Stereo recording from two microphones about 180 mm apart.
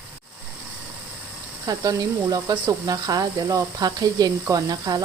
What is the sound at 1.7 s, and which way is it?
Speech, 20° right (ahead or behind).